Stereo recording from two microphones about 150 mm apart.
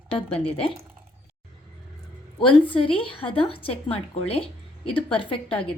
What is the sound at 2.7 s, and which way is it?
A woman's voice, 35° left (ahead or behind).